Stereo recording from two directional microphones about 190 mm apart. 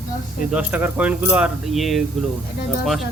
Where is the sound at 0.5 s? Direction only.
5° right (ahead or behind).